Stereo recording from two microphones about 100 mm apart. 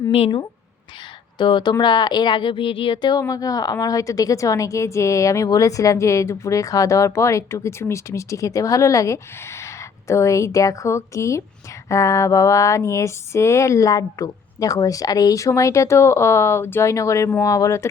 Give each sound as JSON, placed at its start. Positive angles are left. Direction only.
{"t": 1.4, "sound": "a woman's voice", "side_deg": 50}